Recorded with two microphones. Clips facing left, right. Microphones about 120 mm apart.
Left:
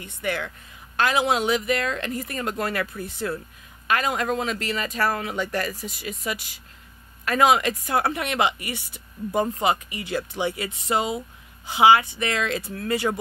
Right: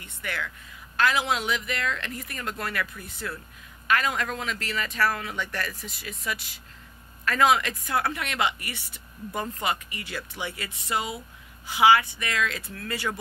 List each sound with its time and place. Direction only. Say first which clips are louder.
0.0 s speech: left 6 dB; 25° left (ahead or behind)
2.8 s speech: left 5 dB; 35° left (ahead or behind)
5.7 s speech: left 6 dB; 15° left (ahead or behind)